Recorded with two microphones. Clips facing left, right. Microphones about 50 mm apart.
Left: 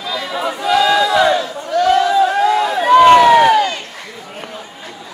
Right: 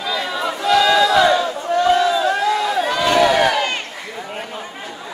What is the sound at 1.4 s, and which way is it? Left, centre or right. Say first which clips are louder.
Crowd: left 1 dB; right.